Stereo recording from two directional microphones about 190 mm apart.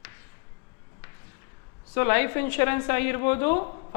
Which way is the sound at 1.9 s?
15° left (ahead or behind).